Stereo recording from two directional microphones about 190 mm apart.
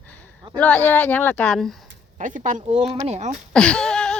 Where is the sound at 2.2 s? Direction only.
40° right (ahead or behind).